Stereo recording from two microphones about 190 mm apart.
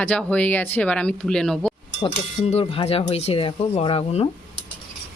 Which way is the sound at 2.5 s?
30° left (ahead or behind).